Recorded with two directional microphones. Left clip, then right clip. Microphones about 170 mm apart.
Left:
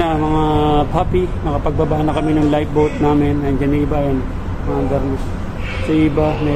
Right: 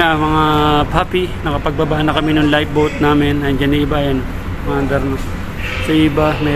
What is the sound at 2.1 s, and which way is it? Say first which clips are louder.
Speech: right 3 dB; centre (ahead or behind).